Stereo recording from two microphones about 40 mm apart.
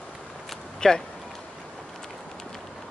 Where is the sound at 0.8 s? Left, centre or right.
Centre.